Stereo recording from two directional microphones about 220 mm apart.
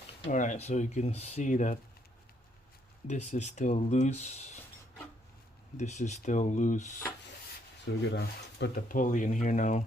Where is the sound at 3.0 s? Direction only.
30° left (ahead or behind).